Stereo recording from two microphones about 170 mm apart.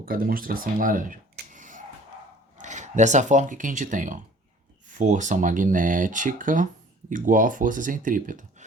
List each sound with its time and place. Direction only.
0.0 s speech: 60° right (ahead or behind)